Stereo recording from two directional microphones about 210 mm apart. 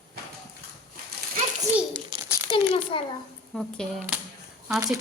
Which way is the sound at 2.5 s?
25° left (ahead or behind).